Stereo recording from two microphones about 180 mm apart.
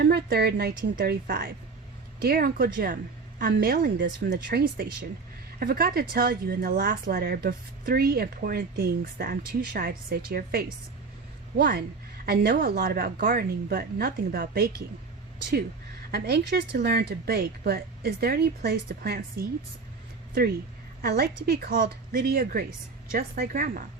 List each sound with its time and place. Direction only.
0.0 s speech: 65° right (ahead or behind)
16.1 s speech: 60° right (ahead or behind)
21.0 s speech: 60° right (ahead or behind)